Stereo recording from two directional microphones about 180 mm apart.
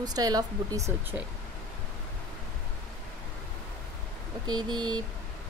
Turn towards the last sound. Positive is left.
turn(degrees=-25)  # may be behind; listen again after turning